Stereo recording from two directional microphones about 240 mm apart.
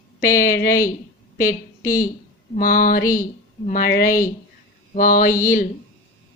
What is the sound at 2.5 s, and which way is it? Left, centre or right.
A woman's voice, left.